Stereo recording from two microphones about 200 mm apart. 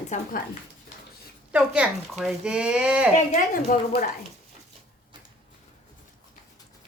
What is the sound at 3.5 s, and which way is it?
Speech, 45° left (ahead or behind).